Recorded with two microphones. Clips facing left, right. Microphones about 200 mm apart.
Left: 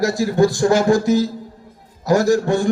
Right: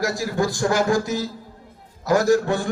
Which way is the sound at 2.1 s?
40° left (ahead or behind).